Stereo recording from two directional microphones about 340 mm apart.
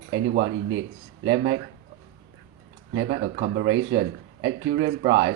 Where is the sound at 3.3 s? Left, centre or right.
Right.